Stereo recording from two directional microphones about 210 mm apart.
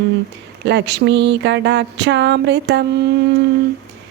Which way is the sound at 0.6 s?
55° right (ahead or behind).